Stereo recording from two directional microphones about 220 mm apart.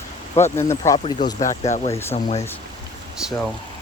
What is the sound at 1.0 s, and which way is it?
Speech, 30° left (ahead or behind).